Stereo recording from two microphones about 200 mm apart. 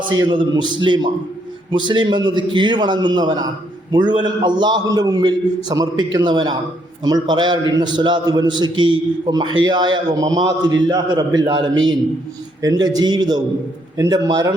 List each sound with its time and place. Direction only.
0.1 s a man's voice: 20° right (ahead or behind)